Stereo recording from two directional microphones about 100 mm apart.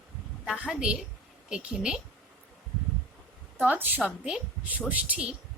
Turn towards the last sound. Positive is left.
turn(degrees=-10)  # may be behind; listen again after turning